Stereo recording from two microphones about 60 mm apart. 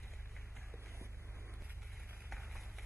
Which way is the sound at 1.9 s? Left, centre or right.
Centre.